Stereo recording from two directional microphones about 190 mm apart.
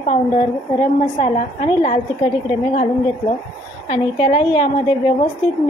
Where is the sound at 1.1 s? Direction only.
30° left (ahead or behind).